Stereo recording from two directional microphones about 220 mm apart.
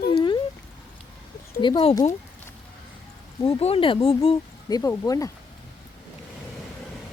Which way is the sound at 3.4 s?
25° left (ahead or behind).